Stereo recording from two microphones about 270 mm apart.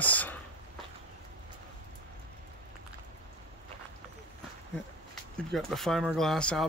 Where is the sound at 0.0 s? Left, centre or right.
Centre.